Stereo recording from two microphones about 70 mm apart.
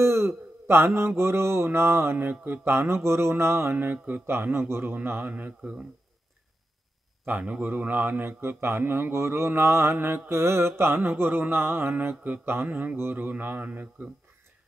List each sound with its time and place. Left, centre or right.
0.0 s mantra: right
2.1 s speech: right
3.7 s speech: right
4.4 s speech: right
7.2 s speech: right